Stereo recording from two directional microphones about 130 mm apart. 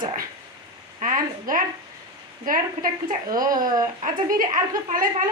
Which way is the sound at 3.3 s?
30° right (ahead or behind).